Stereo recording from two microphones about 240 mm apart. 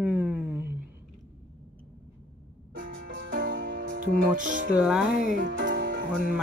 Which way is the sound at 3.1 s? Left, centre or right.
Right.